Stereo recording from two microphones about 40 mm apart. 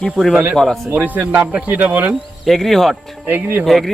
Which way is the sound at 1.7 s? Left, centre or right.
Right.